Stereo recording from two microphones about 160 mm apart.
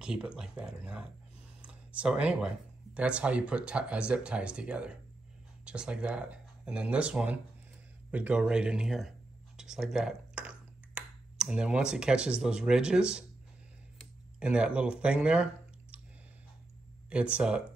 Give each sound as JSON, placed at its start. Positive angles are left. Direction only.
{"t": 0.0, "sound": "speech", "side_deg": -5}
{"t": 14.4, "sound": "speech", "side_deg": -5}
{"t": 17.1, "sound": "speech", "side_deg": -5}